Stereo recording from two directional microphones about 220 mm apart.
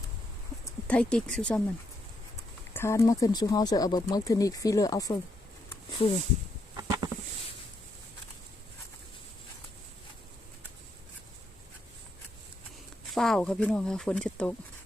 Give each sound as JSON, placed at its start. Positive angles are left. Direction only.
{"t": 0.6, "sound": "speech", "side_deg": 5}
{"t": 6.7, "sound": "a sound", "side_deg": -15}
{"t": 13.1, "sound": "speech", "side_deg": 0}